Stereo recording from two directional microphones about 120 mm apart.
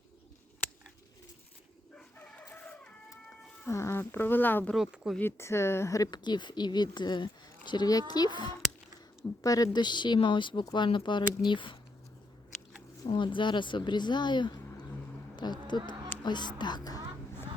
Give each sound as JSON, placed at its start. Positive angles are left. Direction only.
{"t": 2.0, "sound": "chicken", "side_deg": 10}
{"t": 3.7, "sound": "speech", "side_deg": 25}
{"t": 4.7, "sound": "speech", "side_deg": -5}
{"t": 5.1, "sound": "a woman's voice", "side_deg": 20}
{"t": 13.0, "sound": "speech", "side_deg": 40}